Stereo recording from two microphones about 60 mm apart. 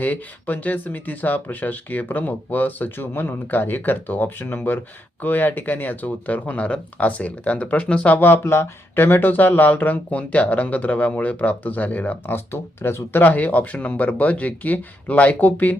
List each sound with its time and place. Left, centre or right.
0.0 s speech: left
13.2 s speech: left